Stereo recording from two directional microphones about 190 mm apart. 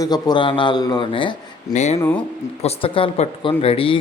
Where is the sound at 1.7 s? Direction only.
35° left (ahead or behind).